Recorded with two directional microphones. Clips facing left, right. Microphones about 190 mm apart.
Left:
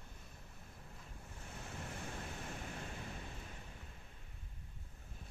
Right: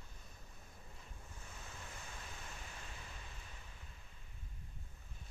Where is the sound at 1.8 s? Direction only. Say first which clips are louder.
Left 9 dB; 50° left (ahead or behind).